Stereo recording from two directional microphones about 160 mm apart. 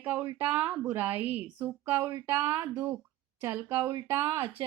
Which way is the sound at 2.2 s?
20° right (ahead or behind).